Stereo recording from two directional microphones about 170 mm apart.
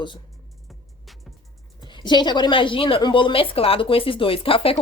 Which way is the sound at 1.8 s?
25° left (ahead or behind).